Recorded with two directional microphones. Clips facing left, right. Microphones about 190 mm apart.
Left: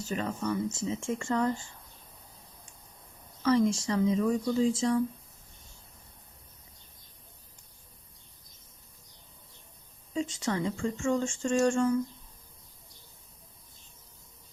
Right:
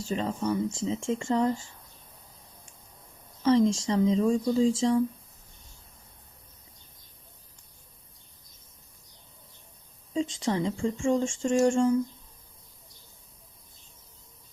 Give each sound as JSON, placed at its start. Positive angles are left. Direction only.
{"t": 0.1, "sound": "speech", "side_deg": -25}
{"t": 3.4, "sound": "speech", "side_deg": -25}
{"t": 10.2, "sound": "speech", "side_deg": -25}